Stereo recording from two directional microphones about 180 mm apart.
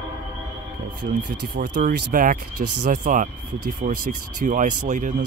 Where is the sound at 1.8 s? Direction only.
50° right (ahead or behind).